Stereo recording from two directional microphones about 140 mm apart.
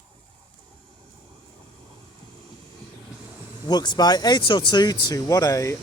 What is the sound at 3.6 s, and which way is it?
Speech, 30° left (ahead or behind).